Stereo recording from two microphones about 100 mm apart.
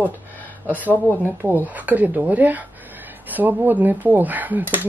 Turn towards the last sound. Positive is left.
turn(degrees=-15)  # may be behind; listen again after turning